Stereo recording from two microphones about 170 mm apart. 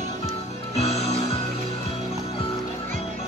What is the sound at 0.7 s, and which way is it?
Music, 40° left (ahead or behind).